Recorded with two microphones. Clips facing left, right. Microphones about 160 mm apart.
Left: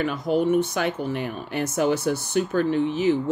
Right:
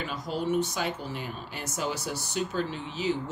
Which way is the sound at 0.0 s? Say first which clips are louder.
Left 9 dB; 60° left (ahead or behind).